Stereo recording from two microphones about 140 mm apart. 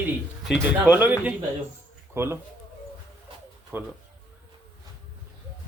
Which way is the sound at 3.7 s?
15° right (ahead or behind).